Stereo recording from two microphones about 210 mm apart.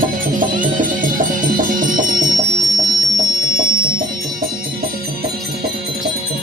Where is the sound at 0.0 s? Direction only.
40° right (ahead or behind).